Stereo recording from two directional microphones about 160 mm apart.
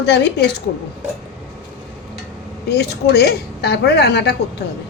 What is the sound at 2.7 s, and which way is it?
A woman's voice, 90° left.